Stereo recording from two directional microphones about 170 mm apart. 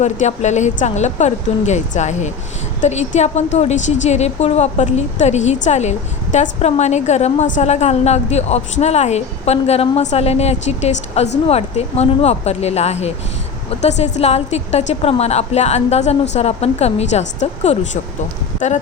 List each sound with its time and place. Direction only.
0.0 s a woman's voice: 45° left (ahead or behind)